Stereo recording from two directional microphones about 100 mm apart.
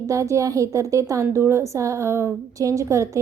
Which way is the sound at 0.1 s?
30° right (ahead or behind).